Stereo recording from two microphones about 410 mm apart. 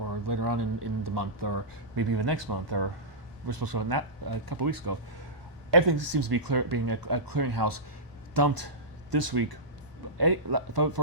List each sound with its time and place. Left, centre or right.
0.0 s a sound: right
0.5 s speech: right
1.0 s speech: right
3.4 s speech: right